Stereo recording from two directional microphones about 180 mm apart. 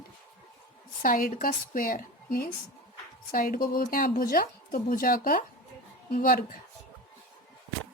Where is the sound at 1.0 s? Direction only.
50° left (ahead or behind).